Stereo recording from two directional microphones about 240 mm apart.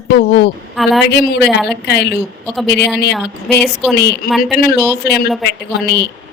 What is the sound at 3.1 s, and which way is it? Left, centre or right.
Speech, centre.